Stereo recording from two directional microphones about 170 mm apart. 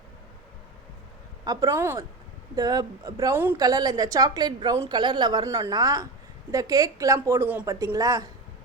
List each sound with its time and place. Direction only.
1.5 s a woman's voice: 15° right (ahead or behind)